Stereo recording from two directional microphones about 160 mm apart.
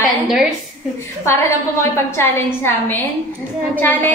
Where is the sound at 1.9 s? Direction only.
15° left (ahead or behind).